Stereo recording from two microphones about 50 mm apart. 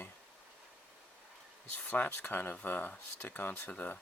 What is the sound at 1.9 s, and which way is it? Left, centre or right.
Speech, left.